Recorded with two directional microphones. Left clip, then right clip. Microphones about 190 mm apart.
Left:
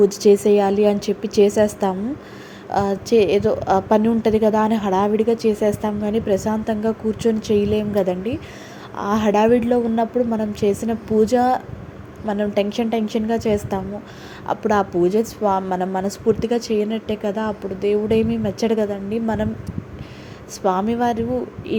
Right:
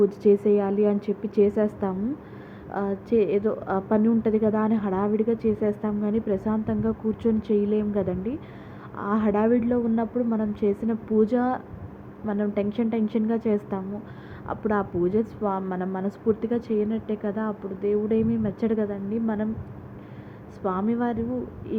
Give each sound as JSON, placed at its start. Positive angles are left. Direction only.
{"t": 0.0, "sound": "a woman's voice", "side_deg": 10}
{"t": 20.7, "sound": "a woman's voice", "side_deg": 15}